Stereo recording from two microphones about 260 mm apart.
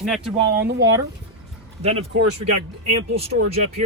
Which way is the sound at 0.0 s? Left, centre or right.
Centre.